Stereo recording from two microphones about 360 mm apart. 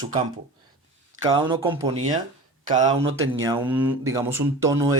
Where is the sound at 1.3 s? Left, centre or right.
Centre.